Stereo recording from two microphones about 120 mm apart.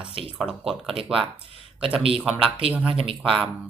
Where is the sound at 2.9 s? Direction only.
50° right (ahead or behind).